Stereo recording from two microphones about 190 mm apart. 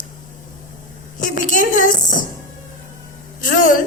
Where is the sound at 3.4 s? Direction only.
45° left (ahead or behind).